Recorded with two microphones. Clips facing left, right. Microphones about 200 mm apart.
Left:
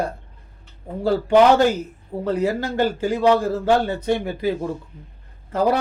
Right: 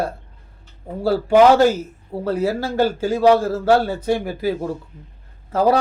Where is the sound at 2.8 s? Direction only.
10° right (ahead or behind).